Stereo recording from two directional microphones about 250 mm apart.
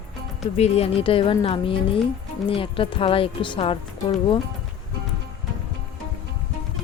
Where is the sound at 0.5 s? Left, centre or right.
Left.